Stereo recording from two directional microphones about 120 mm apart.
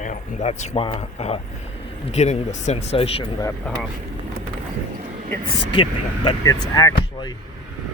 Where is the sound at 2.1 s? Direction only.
80° left.